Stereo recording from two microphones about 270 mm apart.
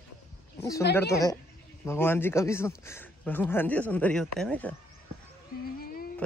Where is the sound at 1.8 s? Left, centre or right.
Centre.